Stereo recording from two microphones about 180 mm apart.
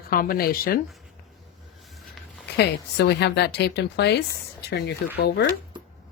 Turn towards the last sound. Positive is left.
turn(degrees=65)  # may be behind; listen again after turning